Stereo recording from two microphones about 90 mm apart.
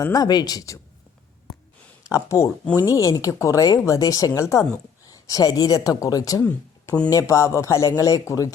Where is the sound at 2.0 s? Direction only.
35° left (ahead or behind).